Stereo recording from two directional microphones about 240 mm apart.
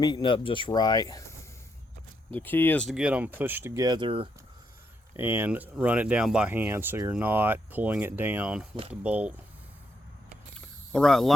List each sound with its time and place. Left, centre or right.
0.0 s speech: centre; by 4.3 s right
5.1 s speech: centre
10.9 s speech: centre